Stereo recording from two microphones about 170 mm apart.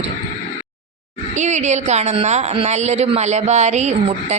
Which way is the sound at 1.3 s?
45° right (ahead or behind).